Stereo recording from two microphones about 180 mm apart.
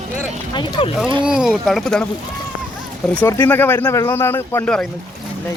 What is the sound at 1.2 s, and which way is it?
Speech, 5° right (ahead or behind).